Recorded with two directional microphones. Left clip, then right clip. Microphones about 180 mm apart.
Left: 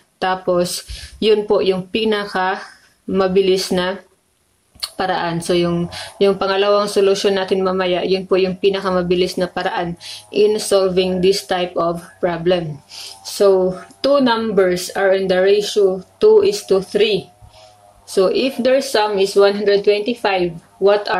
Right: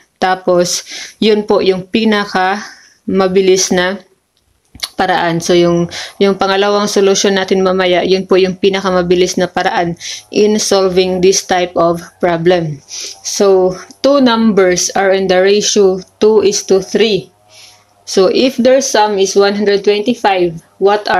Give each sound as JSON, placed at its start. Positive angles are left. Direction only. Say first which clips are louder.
{"t": 0.2, "sound": "speech", "louder": "right 6 dB", "side_deg": -40}